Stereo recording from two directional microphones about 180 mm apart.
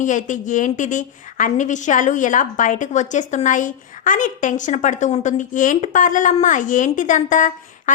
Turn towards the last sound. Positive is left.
turn(degrees=45)  # may be behind; listen again after turning